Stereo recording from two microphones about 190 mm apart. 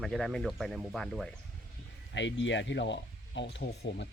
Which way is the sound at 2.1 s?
70° left (ahead or behind).